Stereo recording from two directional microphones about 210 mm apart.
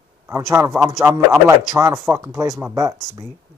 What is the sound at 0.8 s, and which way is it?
A man's voice, 15° right (ahead or behind).